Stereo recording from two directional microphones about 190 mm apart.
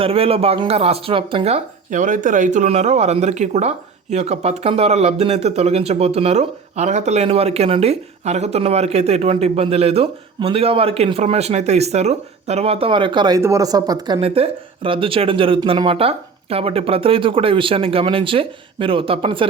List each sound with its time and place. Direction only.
0.0 s speech: 30° right (ahead or behind)